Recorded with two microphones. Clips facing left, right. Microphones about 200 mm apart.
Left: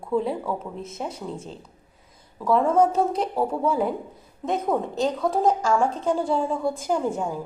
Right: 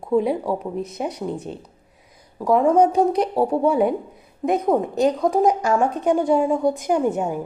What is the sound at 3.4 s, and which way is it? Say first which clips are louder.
Speech: right 5 dB; 30° right (ahead or behind).